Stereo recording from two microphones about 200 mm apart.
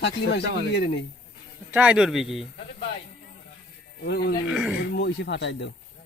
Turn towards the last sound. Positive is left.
turn(degrees=60)  # may be behind; listen again after turning